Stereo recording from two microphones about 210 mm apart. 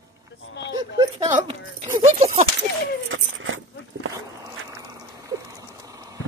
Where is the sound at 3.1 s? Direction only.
70° right (ahead or behind).